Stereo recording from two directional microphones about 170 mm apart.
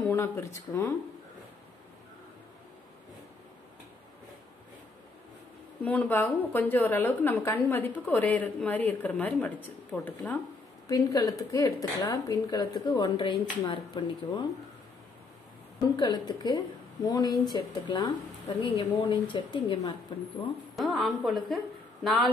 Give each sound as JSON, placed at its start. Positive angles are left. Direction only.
{"t": 0.1, "sound": "a woman's voice", "side_deg": 15}
{"t": 5.9, "sound": "a woman's voice", "side_deg": 10}
{"t": 10.9, "sound": "speech", "side_deg": 20}
{"t": 16.0, "sound": "speech", "side_deg": 25}
{"t": 20.7, "sound": "a woman's voice", "side_deg": 0}